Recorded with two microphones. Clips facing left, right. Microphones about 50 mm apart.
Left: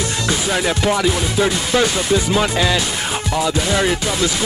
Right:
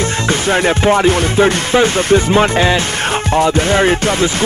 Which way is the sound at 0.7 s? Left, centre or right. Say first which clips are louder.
Right 6 dB; right.